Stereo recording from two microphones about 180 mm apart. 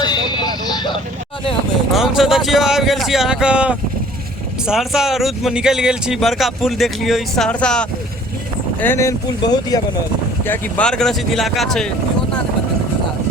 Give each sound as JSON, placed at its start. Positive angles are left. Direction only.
{"t": 0.0, "sound": "vehicle", "side_deg": 25}
{"t": 1.9, "sound": "speech", "side_deg": 0}
{"t": 10.4, "sound": "speech", "side_deg": 10}